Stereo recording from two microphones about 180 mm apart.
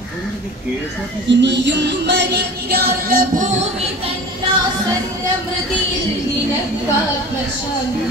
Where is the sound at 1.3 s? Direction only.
75° right (ahead or behind); by 4.1 s 40° right (ahead or behind).